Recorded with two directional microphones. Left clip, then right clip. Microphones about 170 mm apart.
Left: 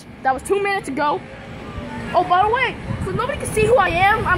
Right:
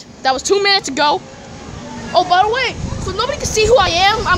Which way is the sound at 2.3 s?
40° right (ahead or behind).